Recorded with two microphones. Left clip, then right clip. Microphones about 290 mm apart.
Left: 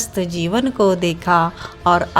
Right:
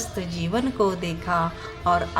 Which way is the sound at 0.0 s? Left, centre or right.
Left.